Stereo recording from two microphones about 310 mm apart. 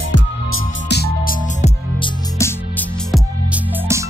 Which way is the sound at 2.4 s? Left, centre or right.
Centre.